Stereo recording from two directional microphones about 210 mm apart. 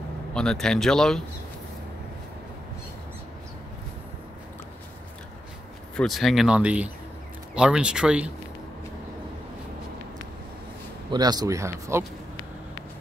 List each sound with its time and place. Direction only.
0.3 s speech: 5° left (ahead or behind)
5.9 s speech: centre (ahead or behind)
11.1 s speech: 20° right (ahead or behind)